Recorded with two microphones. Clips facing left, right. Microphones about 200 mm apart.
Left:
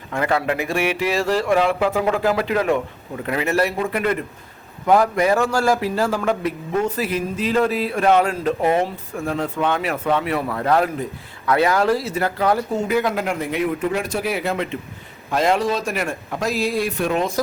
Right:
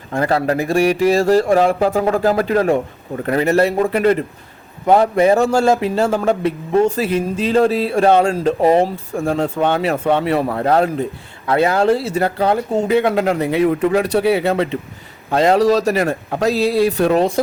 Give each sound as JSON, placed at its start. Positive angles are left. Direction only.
{"t": 0.1, "sound": "a man's voice", "side_deg": -35}